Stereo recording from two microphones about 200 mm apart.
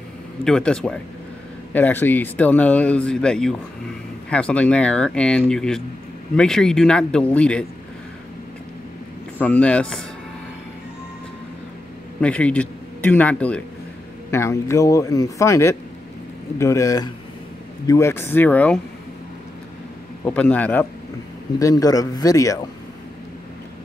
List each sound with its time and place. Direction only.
0.4 s speech: 5° left (ahead or behind)
9.4 s speech: 5° left (ahead or behind)
12.2 s speech: 5° left (ahead or behind)
20.2 s speech: 10° left (ahead or behind)